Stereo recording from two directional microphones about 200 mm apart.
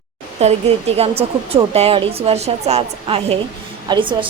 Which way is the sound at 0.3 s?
30° right (ahead or behind).